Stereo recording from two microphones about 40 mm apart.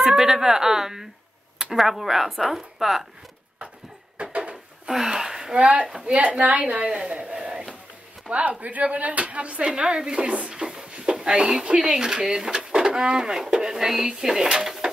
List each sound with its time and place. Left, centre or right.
0.0 s speech: centre
4.2 s drawer open or close: right
4.8 s a sound: centre
5.6 s a woman's voice: right
7.0 s a sound: right
8.3 s a woman's voice: right; by 14.7 s centre